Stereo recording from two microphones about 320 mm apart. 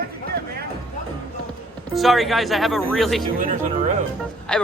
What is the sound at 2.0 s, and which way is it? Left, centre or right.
Speech, centre.